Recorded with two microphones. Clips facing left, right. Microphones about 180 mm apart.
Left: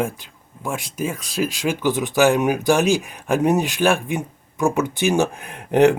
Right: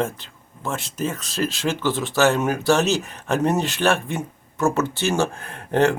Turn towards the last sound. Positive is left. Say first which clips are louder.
# left 4 dB
turn(degrees=15)  # may be behind; listen again after turning